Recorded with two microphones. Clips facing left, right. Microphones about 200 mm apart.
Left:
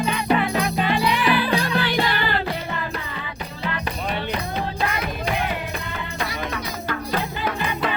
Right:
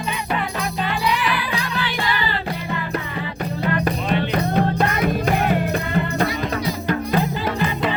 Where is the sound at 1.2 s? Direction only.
30° left (ahead or behind).